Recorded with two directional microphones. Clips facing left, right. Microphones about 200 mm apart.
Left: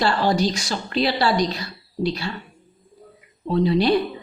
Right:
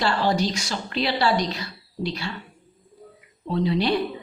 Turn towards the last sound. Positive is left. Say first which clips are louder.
# left 4 dB
turn(degrees=40)  # may be behind; listen again after turning